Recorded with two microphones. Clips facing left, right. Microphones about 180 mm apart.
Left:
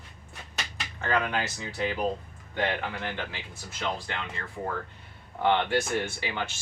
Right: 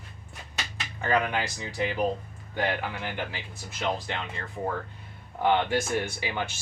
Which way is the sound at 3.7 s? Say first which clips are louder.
Right 3 dB; 15° right (ahead or behind).